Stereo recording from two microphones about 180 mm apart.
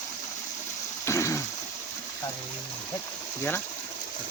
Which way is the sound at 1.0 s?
15° left (ahead or behind).